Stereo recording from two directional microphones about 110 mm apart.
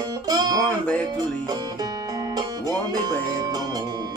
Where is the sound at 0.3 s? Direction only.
35° right (ahead or behind).